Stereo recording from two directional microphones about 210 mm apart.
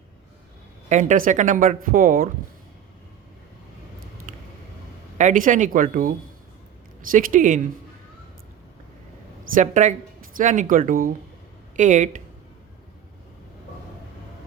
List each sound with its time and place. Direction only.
0.9 s speech: 35° right (ahead or behind)
4.3 s vehicle: 40° right (ahead or behind)
5.1 s speech: 35° right (ahead or behind)
9.6 s speech: 35° right (ahead or behind)